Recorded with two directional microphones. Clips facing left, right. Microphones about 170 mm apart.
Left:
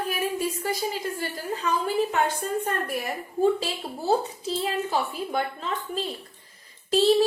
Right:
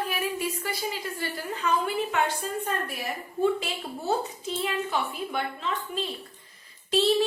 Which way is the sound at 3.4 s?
35° left (ahead or behind).